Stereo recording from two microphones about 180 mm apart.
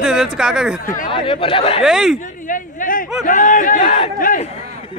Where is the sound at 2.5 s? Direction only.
50° left (ahead or behind).